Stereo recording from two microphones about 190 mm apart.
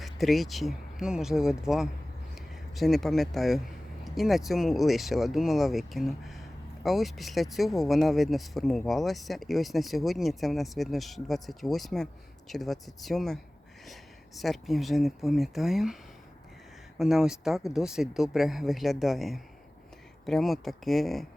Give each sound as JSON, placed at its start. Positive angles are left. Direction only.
{"t": 0.0, "sound": "speech", "side_deg": 0}
{"t": 17.0, "sound": "speech", "side_deg": 0}